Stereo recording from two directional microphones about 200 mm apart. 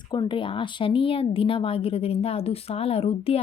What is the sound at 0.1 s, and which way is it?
A woman's voice, 25° left (ahead or behind).